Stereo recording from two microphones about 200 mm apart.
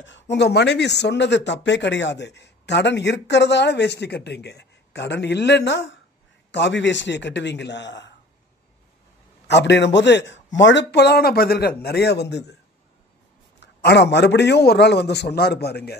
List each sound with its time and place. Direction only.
0.0 s speech: 60° left (ahead or behind)
9.5 s speech: 60° left (ahead or behind)
13.7 s speech: 55° left (ahead or behind)